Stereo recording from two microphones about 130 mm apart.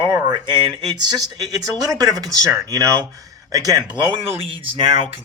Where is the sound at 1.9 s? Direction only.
30° right (ahead or behind).